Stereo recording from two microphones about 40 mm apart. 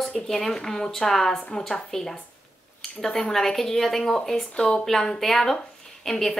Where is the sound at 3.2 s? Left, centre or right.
Centre.